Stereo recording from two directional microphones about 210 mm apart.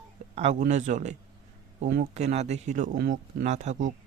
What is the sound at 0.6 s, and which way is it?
Speech, 35° right (ahead or behind).